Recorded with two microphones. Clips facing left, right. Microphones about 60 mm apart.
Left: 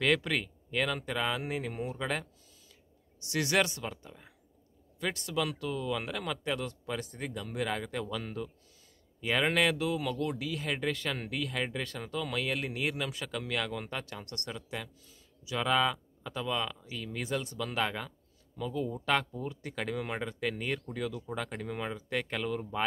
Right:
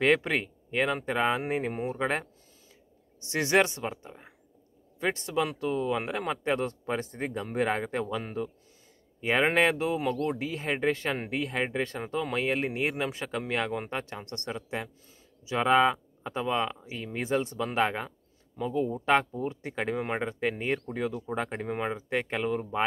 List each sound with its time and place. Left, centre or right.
0.0 s speech: right